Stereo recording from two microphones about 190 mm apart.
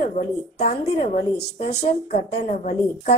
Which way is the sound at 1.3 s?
60° left (ahead or behind).